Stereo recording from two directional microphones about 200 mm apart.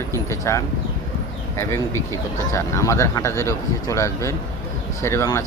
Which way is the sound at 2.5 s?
15° left (ahead or behind).